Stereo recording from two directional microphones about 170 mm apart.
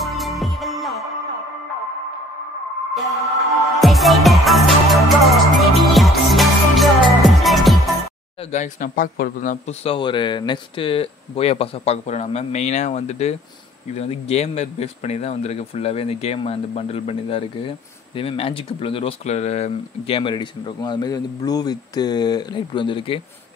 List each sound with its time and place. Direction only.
0.0 s music: centre (ahead or behind)
2.9 s music: centre (ahead or behind)
8.5 s a man's voice: 45° left (ahead or behind)
9.8 s speech: 30° left (ahead or behind)